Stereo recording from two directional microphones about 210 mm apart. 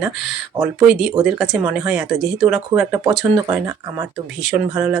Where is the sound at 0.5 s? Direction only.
15° right (ahead or behind).